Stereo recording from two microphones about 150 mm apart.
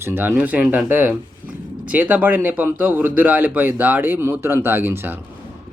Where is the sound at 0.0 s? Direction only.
15° right (ahead or behind).